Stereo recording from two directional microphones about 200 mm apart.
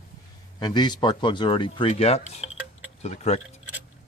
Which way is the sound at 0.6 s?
20° left (ahead or behind).